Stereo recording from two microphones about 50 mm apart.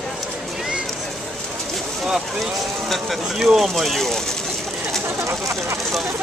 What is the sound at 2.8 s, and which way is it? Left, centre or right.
Speech, centre.